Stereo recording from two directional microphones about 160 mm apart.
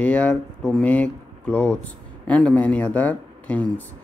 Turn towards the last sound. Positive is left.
turn(degrees=10)  # may be behind; listen again after turning